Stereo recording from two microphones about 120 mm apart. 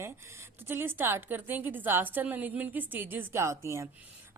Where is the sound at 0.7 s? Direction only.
20° right (ahead or behind).